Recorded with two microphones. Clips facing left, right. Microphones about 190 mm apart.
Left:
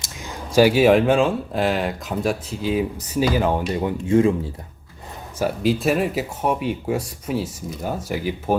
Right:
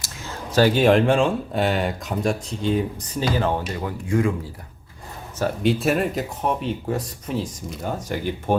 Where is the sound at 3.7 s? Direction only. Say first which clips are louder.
Left 5 dB; 20° left (ahead or behind).